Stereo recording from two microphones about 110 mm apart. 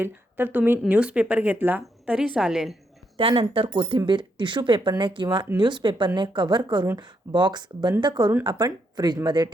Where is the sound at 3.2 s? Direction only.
55° right (ahead or behind).